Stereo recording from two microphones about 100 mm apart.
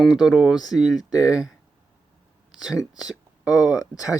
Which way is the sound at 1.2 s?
5° right (ahead or behind).